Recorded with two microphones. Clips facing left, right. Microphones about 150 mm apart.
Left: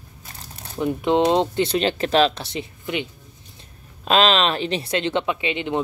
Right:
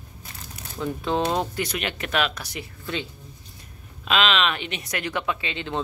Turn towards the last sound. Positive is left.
turn(degrees=20)  # may be behind; listen again after turning